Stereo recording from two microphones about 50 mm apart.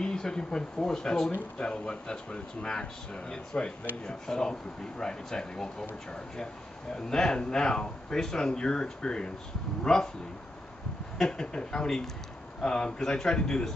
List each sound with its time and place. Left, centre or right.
0.0 s speech: centre
11.1 s speech: centre